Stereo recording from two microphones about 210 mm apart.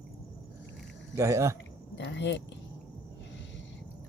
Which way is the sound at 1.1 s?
15° right (ahead or behind).